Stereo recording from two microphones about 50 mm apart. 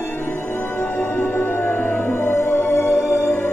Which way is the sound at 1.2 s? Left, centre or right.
Left.